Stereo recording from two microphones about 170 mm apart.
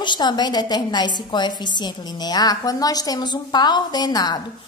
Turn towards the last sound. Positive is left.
turn(degrees=25)  # may be behind; listen again after turning